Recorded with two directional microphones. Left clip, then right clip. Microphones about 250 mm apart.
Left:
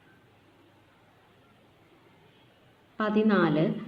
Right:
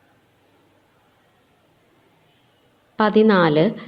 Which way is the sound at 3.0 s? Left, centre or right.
Right.